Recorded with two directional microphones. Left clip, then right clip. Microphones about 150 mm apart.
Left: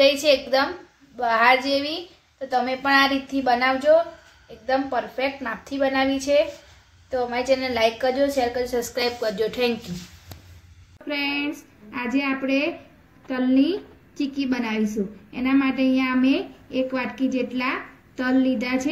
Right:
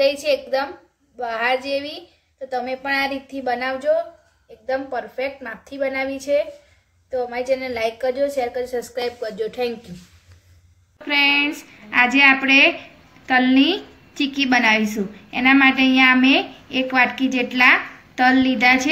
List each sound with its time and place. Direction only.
0.0 s a woman's voice: centre (ahead or behind)
11.1 s a woman's voice: 5° left (ahead or behind)